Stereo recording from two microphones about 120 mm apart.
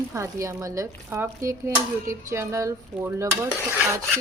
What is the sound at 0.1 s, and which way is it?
Speech, 25° right (ahead or behind).